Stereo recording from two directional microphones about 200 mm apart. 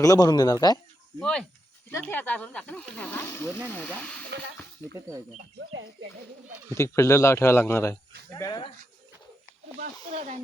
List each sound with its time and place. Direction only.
0.0 s speech: 20° left (ahead or behind)
1.2 s speech: 5° left (ahead or behind)
4.9 s speech: 15° right (ahead or behind)
6.7 s speech: 15° left (ahead or behind)
10.1 s speech: 30° right (ahead or behind)